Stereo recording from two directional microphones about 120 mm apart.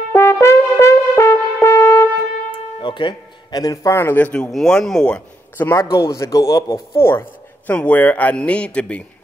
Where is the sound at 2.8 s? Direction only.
40° left (ahead or behind); by 5.2 s 5° left (ahead or behind).